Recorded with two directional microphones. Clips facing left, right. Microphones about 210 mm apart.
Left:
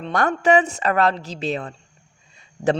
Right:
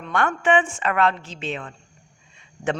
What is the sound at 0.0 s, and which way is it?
A woman's voice, 35° left (ahead or behind).